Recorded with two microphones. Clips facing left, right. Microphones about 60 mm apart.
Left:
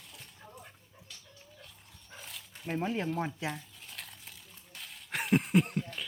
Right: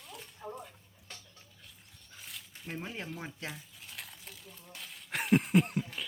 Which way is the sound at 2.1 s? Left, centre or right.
Centre.